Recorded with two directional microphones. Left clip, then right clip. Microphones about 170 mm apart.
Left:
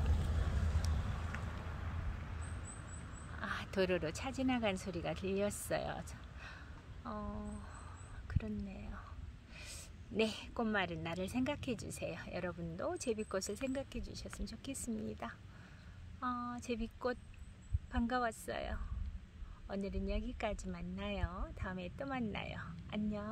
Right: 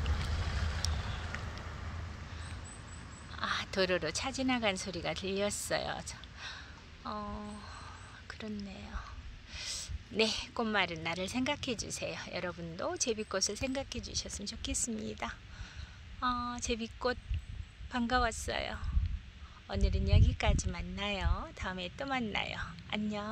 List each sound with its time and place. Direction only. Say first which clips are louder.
0.8 s vehicle: right 8 dB; 5° left (ahead or behind)
1.2 s a sound: right 4 dB; 45° right (ahead or behind)
3.3 s a woman's voice: right 5 dB; centre (ahead or behind)